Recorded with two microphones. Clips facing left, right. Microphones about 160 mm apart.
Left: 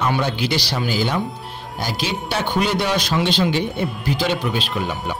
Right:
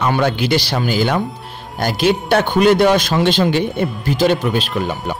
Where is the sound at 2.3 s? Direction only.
55° right (ahead or behind).